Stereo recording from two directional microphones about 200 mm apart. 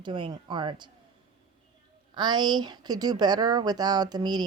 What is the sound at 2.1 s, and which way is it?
Speech, 20° right (ahead or behind).